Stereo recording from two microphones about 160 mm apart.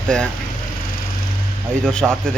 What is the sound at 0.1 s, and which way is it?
Speech, 5° left (ahead or behind).